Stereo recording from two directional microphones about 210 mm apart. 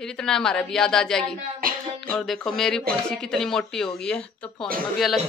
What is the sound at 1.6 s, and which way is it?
Music, 45° right (ahead or behind).